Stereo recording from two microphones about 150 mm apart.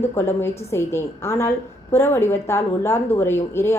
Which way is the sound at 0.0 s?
15° left (ahead or behind).